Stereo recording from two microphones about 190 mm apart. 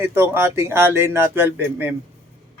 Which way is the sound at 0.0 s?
10° right (ahead or behind).